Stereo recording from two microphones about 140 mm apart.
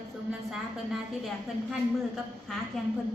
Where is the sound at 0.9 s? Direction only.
Centre (ahead or behind).